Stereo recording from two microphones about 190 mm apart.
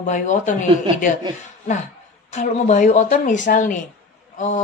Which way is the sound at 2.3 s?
40° left (ahead or behind).